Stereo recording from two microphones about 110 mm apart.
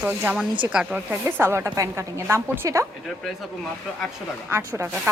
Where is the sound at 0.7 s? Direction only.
10° right (ahead or behind).